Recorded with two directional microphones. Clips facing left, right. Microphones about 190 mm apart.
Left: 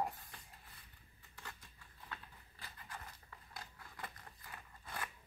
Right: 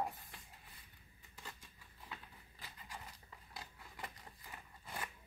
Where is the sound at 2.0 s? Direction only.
10° right (ahead or behind).